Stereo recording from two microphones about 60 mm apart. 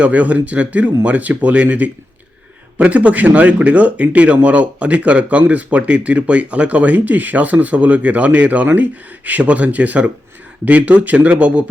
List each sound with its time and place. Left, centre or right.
0.0 s speech: right